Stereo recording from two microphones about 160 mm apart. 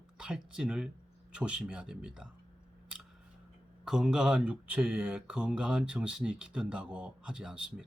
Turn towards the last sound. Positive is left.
turn(degrees=-5)  # may be behind; listen again after turning